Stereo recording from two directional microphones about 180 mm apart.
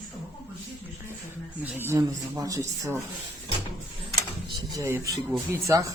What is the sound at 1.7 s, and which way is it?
Speech, 15° right (ahead or behind).